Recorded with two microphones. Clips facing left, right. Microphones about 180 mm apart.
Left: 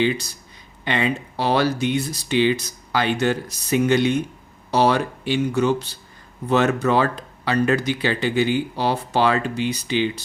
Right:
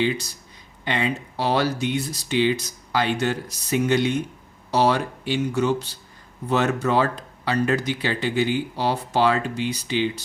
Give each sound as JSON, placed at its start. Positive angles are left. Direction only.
{"t": 0.9, "sound": "speech", "side_deg": 70}